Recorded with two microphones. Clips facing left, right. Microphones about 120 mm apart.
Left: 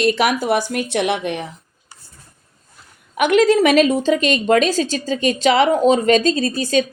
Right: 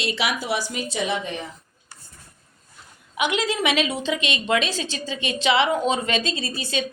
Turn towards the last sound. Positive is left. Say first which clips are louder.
# left 9 dB
turn(degrees=45)  # may be behind; listen again after turning